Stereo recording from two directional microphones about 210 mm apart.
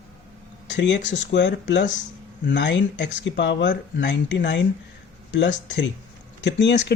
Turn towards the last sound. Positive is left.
turn(degrees=55)  # may be behind; listen again after turning